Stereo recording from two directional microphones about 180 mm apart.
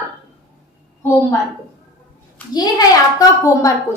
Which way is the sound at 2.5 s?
20° left (ahead or behind).